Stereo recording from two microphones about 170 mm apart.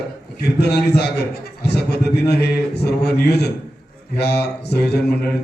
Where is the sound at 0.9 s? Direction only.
75° left (ahead or behind).